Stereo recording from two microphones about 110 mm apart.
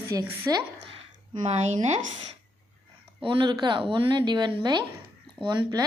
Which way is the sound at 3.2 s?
45° right (ahead or behind).